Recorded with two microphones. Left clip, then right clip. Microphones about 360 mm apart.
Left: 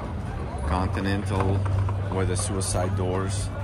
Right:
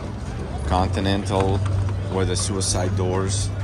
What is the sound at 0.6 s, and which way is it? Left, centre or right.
Speech, centre.